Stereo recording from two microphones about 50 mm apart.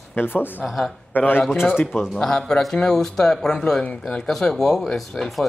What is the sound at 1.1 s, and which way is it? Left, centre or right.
Speech, left.